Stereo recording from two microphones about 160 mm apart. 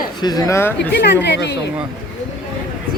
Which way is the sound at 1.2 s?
90° left.